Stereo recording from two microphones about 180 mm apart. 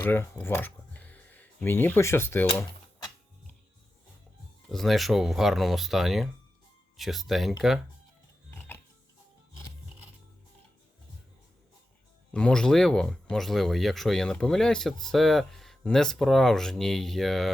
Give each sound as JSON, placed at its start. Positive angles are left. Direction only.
{"t": 0.0, "sound": "speech", "side_deg": 10}
{"t": 4.7, "sound": "speech", "side_deg": 0}
{"t": 8.4, "sound": "music", "side_deg": 10}
{"t": 12.3, "sound": "speech", "side_deg": 5}